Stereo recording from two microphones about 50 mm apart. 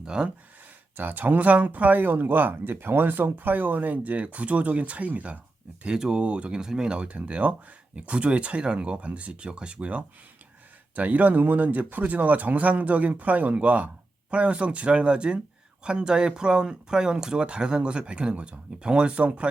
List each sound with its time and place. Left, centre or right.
0.0 s speech: centre
0.9 s speech: right
5.8 s speech: centre